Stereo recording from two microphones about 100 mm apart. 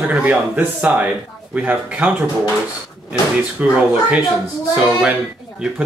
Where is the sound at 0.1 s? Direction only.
15° right (ahead or behind).